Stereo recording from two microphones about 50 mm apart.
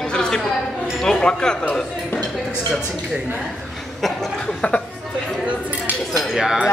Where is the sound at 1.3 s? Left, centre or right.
Centre.